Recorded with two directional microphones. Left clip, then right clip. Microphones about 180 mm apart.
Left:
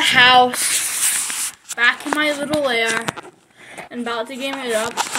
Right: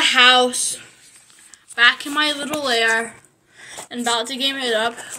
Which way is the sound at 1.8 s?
15° left (ahead or behind).